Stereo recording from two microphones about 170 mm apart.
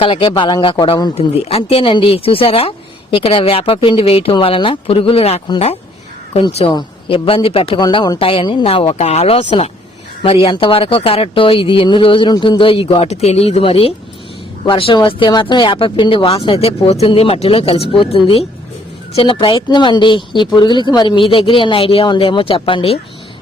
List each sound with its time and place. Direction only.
0.0 s speech: 30° left (ahead or behind)